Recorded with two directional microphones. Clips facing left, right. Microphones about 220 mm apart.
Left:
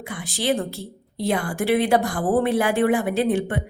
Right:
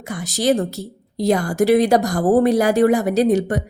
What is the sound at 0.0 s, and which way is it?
A woman's voice, 40° right (ahead or behind).